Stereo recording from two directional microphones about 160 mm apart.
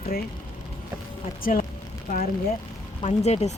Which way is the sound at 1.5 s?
55° left (ahead or behind).